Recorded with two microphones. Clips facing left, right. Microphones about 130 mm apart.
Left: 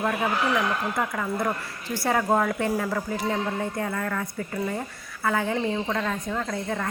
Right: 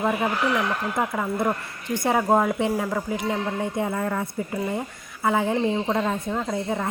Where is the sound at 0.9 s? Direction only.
20° right (ahead or behind).